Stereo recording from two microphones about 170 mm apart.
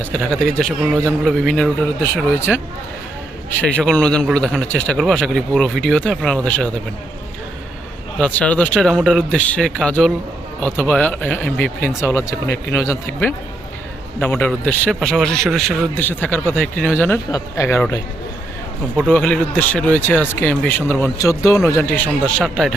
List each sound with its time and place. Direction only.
0.0 s a man's voice: 5° left (ahead or behind)
3.6 s a man's voice: 10° left (ahead or behind)
8.2 s a man's voice: 10° left (ahead or behind)
19.0 s speech: 5° left (ahead or behind)